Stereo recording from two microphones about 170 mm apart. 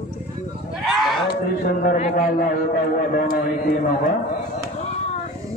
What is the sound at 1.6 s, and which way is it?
A man's voice, 50° left (ahead or behind).